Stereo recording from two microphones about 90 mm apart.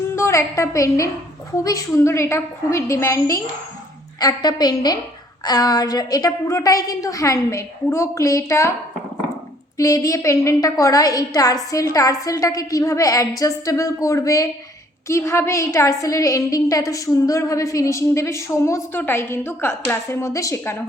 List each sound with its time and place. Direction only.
0.2 s a woman's voice: 35° left (ahead or behind)
9.7 s a woman's voice: 40° left (ahead or behind)